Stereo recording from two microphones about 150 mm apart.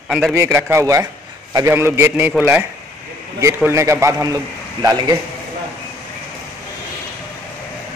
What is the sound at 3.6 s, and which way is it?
A man's voice, 15° right (ahead or behind).